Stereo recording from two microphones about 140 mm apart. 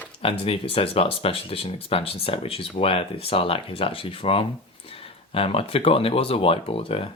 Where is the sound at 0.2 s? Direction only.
40° left (ahead or behind).